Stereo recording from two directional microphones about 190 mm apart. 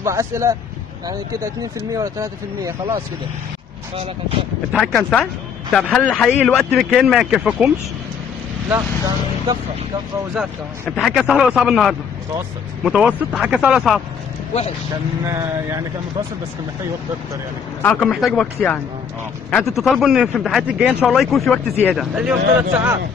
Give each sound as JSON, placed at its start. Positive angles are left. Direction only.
{"t": 0.0, "sound": "speech", "side_deg": -15}
{"t": 4.7, "sound": "speech", "side_deg": 5}
{"t": 8.6, "sound": "speech", "side_deg": -15}
{"t": 10.3, "sound": "speech", "side_deg": 0}
{"t": 17.8, "sound": "speech", "side_deg": 5}